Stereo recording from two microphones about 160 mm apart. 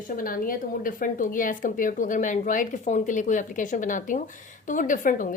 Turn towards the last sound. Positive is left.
turn(degrees=55)  # may be behind; listen again after turning